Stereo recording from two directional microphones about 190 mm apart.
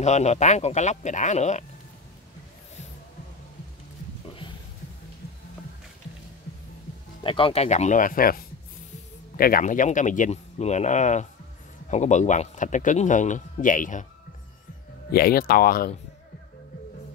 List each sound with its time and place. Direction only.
0.0 s speech: 35° left (ahead or behind)
7.2 s speech: 30° left (ahead or behind); by 8.4 s 45° left (ahead or behind)
9.4 s speech: 45° left (ahead or behind)
15.0 s speech: 55° left (ahead or behind)